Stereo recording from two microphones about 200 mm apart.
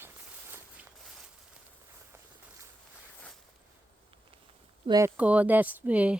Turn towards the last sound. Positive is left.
turn(degrees=-5)  # may be behind; listen again after turning